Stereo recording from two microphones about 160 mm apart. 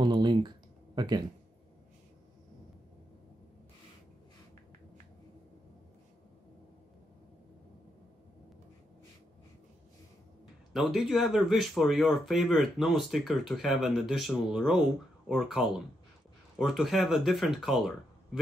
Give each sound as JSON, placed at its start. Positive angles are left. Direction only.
{"t": 0.0, "sound": "typing", "side_deg": -30}
{"t": 0.9, "sound": "speech", "side_deg": -25}
{"t": 10.7, "sound": "speech", "side_deg": 0}